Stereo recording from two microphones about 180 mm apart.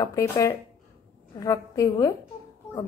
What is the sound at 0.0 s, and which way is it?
A woman's voice, 20° left (ahead or behind).